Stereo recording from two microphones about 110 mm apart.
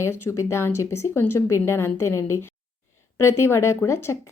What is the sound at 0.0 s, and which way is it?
A woman's voice, 25° left (ahead or behind).